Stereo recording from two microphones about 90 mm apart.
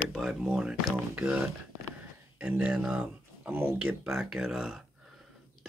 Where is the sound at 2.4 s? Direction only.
15° right (ahead or behind).